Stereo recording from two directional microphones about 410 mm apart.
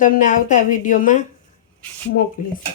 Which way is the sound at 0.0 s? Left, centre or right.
Centre.